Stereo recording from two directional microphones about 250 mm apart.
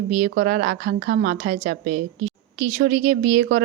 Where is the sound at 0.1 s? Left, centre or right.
Right.